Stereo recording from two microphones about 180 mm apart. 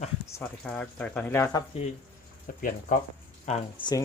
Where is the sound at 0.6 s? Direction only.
5° left (ahead or behind).